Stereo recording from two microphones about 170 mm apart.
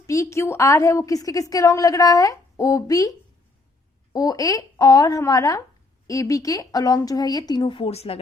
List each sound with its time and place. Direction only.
0.1 s a woman's voice: 20° left (ahead or behind); by 8.2 s 35° left (ahead or behind)